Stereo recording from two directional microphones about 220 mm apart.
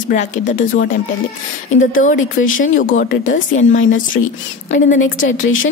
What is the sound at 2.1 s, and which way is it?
Speech, 65° left (ahead or behind).